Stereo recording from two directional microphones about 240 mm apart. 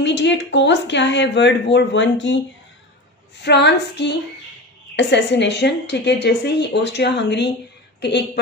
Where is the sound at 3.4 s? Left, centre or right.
Left.